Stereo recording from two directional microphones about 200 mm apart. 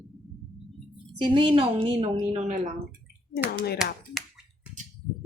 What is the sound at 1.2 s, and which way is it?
A woman's voice, 25° right (ahead or behind).